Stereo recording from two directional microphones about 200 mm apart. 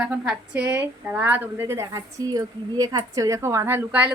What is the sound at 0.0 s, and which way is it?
A woman's voice, 5° right (ahead or behind).